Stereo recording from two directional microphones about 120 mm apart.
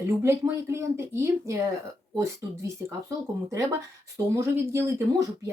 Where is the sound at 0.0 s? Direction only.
20° right (ahead or behind).